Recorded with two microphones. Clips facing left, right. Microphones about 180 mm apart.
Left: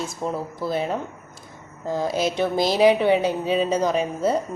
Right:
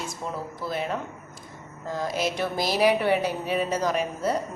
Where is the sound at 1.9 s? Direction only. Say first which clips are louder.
Left 4 dB; 30° left (ahead or behind).